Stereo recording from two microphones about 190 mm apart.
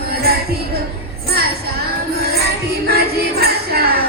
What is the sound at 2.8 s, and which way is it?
Music, 55° right (ahead or behind).